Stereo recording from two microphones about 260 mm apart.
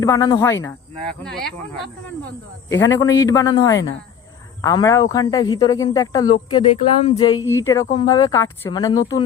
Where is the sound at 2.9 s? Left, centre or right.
Centre.